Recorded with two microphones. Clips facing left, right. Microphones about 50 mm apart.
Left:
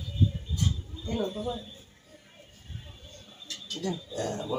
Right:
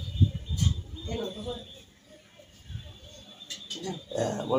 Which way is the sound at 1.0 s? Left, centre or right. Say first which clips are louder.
Left 3 dB; centre.